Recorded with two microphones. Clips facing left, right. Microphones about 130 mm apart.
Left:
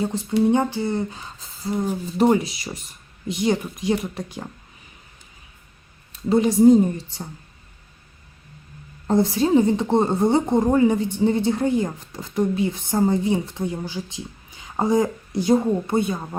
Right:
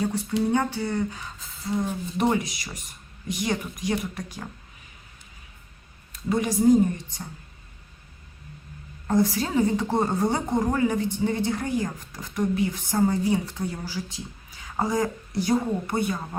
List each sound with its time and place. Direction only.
0.0 s a woman's voice: 25° left (ahead or behind)
6.2 s a woman's voice: 25° left (ahead or behind)
9.0 s a woman's voice: 25° left (ahead or behind)